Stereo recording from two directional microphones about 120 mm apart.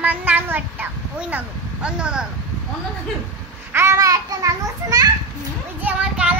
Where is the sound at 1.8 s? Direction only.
10° right (ahead or behind).